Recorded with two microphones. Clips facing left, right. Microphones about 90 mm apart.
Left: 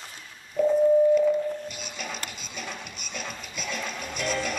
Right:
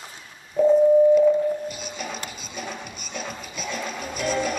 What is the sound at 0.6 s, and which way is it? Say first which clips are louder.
Busy signal: right 5 dB; 20° right (ahead or behind).